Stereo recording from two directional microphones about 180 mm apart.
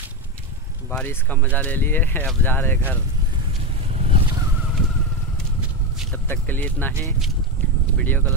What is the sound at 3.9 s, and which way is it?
Vehicle, 35° right (ahead or behind).